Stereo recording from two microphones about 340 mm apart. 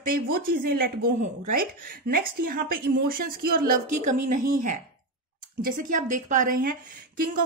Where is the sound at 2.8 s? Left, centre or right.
Right.